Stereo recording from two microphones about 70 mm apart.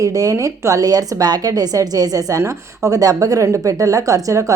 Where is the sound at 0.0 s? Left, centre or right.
Right.